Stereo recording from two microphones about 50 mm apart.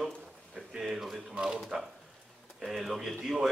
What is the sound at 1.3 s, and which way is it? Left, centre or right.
Speech, right.